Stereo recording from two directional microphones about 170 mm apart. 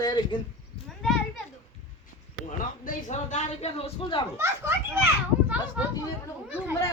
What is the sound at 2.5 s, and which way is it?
Speech, 45° left (ahead or behind).